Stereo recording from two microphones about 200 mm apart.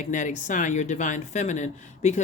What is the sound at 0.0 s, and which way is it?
Speech, 40° left (ahead or behind).